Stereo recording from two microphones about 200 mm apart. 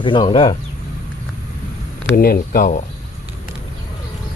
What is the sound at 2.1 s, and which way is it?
Speech, 45° left (ahead or behind).